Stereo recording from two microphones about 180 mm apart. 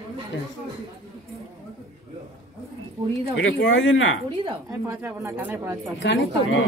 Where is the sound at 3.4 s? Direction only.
85° left.